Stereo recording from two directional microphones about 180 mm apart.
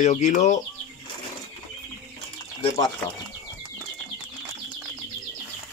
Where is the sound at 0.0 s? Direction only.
45° left (ahead or behind).